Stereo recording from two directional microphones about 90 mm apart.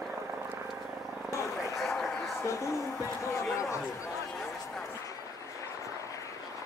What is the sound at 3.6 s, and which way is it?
Speech, 35° left (ahead or behind).